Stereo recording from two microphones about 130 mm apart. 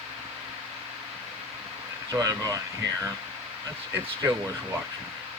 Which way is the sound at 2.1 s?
25° right (ahead or behind).